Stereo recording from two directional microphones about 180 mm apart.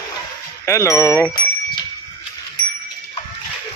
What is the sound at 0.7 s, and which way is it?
Speech, 15° left (ahead or behind).